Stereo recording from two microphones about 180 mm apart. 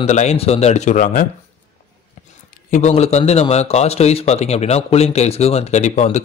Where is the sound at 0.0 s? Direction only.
40° left (ahead or behind).